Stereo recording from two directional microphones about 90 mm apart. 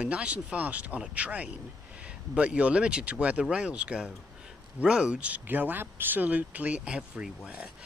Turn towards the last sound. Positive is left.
turn(degrees=-10)  # may be behind; listen again after turning